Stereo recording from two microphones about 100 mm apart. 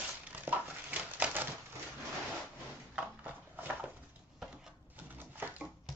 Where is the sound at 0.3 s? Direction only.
15° right (ahead or behind).